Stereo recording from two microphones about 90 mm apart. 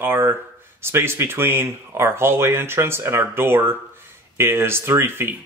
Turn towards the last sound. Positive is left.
turn(degrees=-25)  # may be behind; listen again after turning